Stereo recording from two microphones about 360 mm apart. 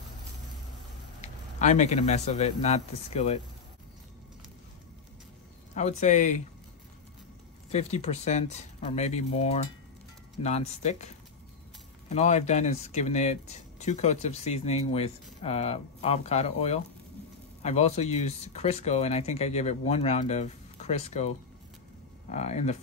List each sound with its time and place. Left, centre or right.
1.2 s a man's voice: centre
5.8 s speech: centre
7.7 s speech: centre
12.1 s speech: centre
22.3 s speech: centre